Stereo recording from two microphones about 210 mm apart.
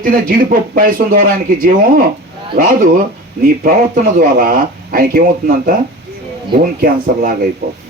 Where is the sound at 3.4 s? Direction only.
45° right (ahead or behind).